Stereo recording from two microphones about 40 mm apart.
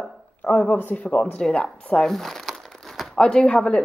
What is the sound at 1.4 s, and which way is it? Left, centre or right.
Speech, left.